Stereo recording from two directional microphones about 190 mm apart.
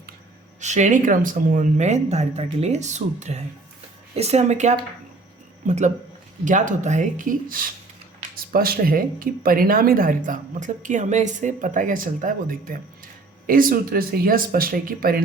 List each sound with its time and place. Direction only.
0.6 s speech: 40° right (ahead or behind)